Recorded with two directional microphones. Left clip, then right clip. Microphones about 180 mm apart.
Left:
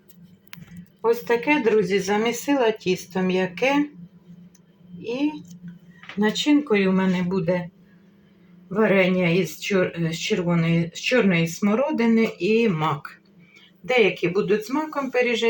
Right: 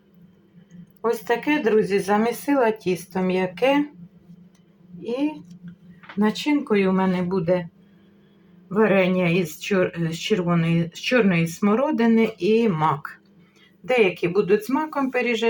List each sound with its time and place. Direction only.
1.0 s speech: 5° right (ahead or behind)
6.1 s speech: 5° right (ahead or behind)
8.7 s speech: centre (ahead or behind)